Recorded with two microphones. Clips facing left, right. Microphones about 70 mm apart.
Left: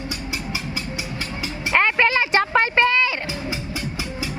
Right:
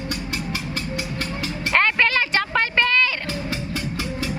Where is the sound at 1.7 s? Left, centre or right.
Centre.